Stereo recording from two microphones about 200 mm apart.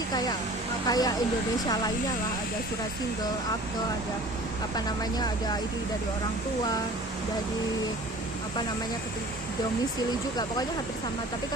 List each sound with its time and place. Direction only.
0.9 s speech: 20° left (ahead or behind)